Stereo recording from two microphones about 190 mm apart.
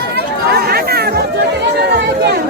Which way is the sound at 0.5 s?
55° right (ahead or behind).